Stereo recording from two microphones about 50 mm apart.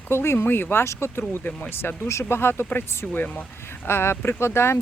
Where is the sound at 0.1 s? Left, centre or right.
Left.